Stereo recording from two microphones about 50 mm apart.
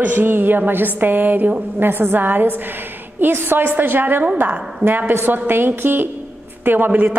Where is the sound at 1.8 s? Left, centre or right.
Right.